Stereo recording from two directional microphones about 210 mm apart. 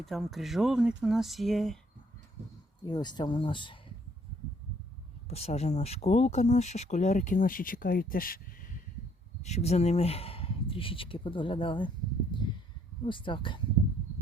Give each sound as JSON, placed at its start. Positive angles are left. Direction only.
{"t": 0.0, "sound": "speech", "side_deg": 0}
{"t": 2.8, "sound": "speech", "side_deg": 20}
{"t": 5.3, "sound": "speech", "side_deg": 30}
{"t": 9.4, "sound": "speech", "side_deg": 30}
{"t": 13.1, "sound": "speech", "side_deg": 25}